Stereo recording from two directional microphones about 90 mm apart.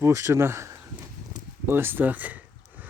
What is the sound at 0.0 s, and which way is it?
Speech, 30° right (ahead or behind).